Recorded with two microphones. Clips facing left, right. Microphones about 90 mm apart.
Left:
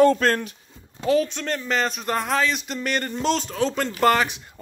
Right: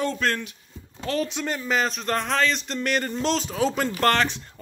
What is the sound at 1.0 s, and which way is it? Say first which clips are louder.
Speech: left 6 dB; 5° left (ahead or behind).